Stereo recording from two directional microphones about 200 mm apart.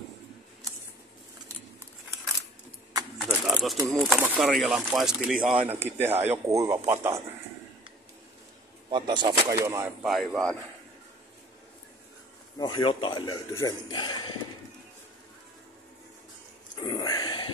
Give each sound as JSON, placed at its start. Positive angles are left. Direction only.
{"t": 3.2, "sound": "a sound", "side_deg": 5}
{"t": 3.9, "sound": "speech", "side_deg": 0}
{"t": 8.9, "sound": "speech", "side_deg": -25}
{"t": 10.0, "sound": "speech", "side_deg": 0}
{"t": 12.5, "sound": "a man's voice", "side_deg": 20}
{"t": 16.8, "sound": "a sound", "side_deg": 20}